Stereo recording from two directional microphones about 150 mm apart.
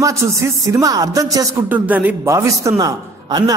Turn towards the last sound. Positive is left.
turn(degrees=-30)  # may be behind; listen again after turning